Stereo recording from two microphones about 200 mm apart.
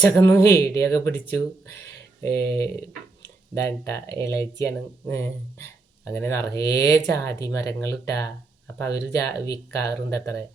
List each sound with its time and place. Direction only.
0.1 s speech: 15° left (ahead or behind)
2.2 s speech: 15° left (ahead or behind)